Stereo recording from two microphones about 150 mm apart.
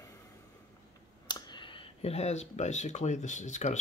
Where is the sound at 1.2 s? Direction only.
30° left (ahead or behind).